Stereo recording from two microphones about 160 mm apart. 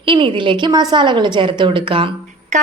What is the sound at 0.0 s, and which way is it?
A woman's voice, 30° right (ahead or behind).